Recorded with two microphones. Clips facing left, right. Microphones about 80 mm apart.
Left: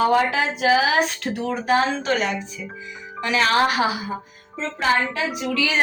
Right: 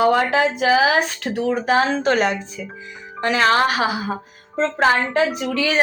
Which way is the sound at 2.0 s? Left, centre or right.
Right.